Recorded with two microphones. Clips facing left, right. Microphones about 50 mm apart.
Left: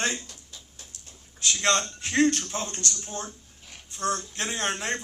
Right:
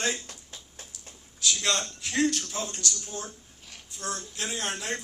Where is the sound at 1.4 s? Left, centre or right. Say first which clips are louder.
Left 3 dB; left.